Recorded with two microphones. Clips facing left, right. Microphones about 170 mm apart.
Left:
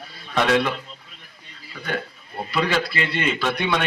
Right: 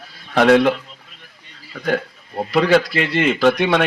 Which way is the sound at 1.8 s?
40° right (ahead or behind).